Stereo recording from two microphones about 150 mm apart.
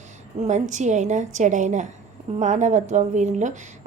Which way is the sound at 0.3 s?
45° right (ahead or behind).